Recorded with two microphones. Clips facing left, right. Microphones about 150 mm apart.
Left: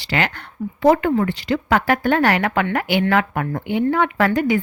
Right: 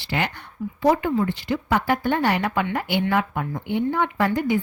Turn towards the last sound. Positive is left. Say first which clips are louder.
# left 4 dB
turn(degrees=80)